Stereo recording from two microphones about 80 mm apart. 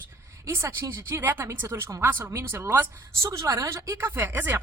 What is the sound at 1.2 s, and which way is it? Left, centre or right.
Speech, right.